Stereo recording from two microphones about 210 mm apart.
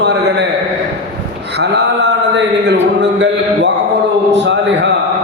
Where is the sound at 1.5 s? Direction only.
55° right (ahead or behind).